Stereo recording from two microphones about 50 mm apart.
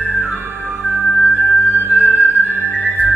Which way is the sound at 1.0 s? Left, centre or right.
Left.